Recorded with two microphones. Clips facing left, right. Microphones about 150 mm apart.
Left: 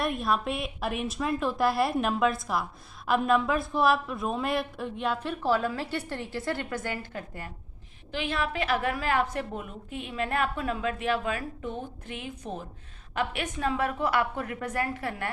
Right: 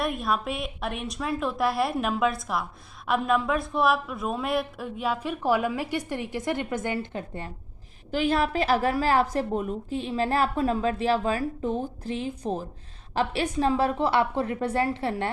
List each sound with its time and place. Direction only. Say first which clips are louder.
0.0 s a woman's voice: right 1 dB; centre (ahead or behind); by 7.5 s 25° right (ahead or behind)
8.1 s a woman's voice: right 6 dB; 40° right (ahead or behind)